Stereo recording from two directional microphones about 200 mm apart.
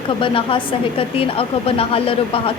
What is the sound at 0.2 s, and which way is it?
A woman's voice, 25° left (ahead or behind).